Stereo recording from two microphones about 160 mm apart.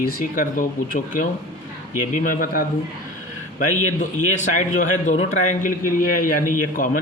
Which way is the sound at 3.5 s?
50° left (ahead or behind).